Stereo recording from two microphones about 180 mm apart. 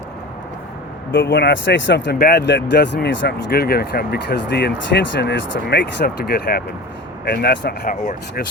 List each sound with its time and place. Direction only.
1.3 s speech: 75° left (ahead or behind); by 8.4 s 50° left (ahead or behind)